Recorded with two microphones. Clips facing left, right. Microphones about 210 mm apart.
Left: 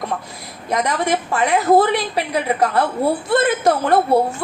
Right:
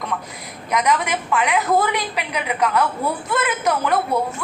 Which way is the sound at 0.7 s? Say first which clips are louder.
Left 1 dB; 30° left (ahead or behind).